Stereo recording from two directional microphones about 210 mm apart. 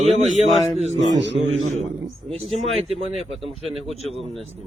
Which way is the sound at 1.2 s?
60° right (ahead or behind).